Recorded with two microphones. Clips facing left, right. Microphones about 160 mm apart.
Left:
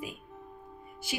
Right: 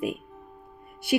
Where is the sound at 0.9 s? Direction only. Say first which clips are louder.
Right 12 dB; 60° right (ahead or behind).